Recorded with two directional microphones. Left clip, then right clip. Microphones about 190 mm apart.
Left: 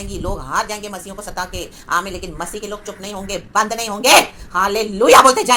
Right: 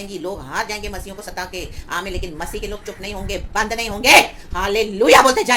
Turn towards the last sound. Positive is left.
turn(degrees=15)  # may be behind; listen again after turning